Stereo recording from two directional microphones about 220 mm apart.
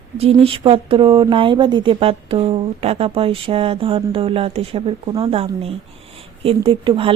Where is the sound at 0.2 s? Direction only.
25° right (ahead or behind).